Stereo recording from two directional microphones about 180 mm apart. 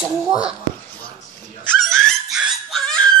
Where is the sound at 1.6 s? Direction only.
5° left (ahead or behind).